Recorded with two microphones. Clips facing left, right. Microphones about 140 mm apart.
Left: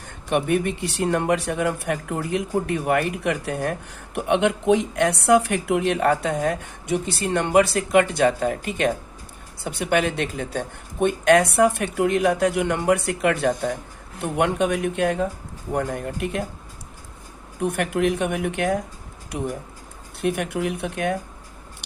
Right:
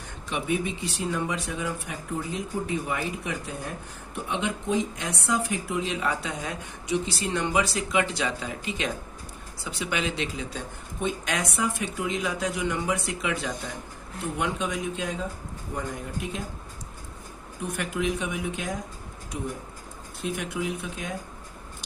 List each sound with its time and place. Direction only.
0.0 s speech: 60° left (ahead or behind)
17.6 s speech: 60° left (ahead or behind)
20.2 s speech: 60° left (ahead or behind)